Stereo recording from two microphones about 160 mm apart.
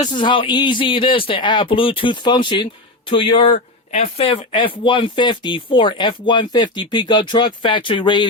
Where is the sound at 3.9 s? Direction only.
40° left (ahead or behind).